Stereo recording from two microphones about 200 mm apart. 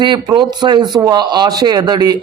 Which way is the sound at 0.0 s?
20° right (ahead or behind).